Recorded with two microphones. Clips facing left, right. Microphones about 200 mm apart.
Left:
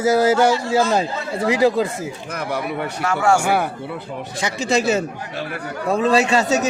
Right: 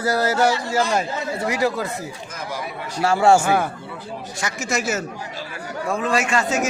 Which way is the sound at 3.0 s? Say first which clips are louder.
Right 3 dB; 30° right (ahead or behind).